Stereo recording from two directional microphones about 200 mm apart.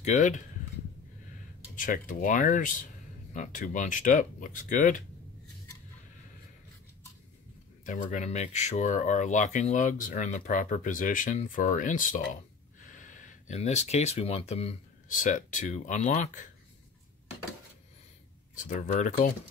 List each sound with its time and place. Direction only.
0.0 s speech: 40° left (ahead or behind)
1.8 s speech: 40° left (ahead or behind)
7.8 s speech: 40° left (ahead or behind)
18.5 s speech: 40° left (ahead or behind)